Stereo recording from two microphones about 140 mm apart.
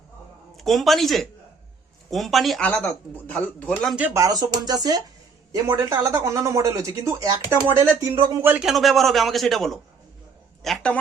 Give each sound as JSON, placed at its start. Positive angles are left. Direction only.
{"t": 0.5, "sound": "a man's voice", "side_deg": 0}
{"t": 2.6, "sound": "a man's voice", "side_deg": 10}
{"t": 4.1, "sound": "speech", "side_deg": -25}
{"t": 8.5, "sound": "a man's voice", "side_deg": 0}